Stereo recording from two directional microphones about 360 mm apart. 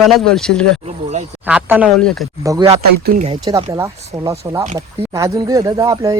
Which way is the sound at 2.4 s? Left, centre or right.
Centre.